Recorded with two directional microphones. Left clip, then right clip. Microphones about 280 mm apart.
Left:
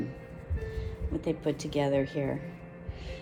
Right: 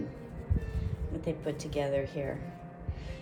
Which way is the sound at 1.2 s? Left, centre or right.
Left.